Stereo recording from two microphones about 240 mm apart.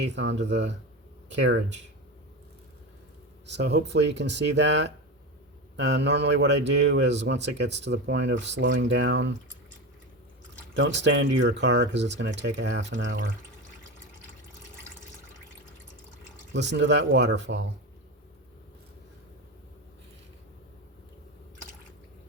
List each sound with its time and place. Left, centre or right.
0.0 s speech: right
3.4 s speech: right
10.8 s speech: right
16.5 s speech: right